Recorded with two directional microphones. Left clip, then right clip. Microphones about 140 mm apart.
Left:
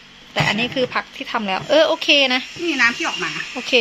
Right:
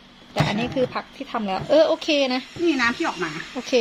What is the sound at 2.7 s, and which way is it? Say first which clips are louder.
Speech: left 3 dB; 30° right (ahead or behind).